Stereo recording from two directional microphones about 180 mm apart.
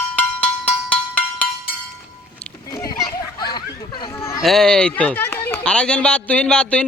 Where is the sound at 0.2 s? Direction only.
5° left (ahead or behind).